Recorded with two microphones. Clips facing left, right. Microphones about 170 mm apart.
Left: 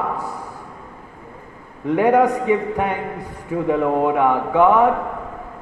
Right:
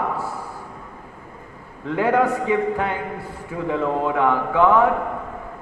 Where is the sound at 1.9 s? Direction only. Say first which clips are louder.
Left 4 dB; 15° left (ahead or behind).